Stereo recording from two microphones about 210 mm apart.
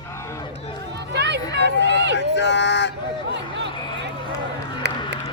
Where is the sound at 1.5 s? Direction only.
55° right (ahead or behind).